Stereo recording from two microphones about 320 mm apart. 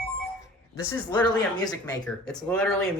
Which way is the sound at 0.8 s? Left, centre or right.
Centre.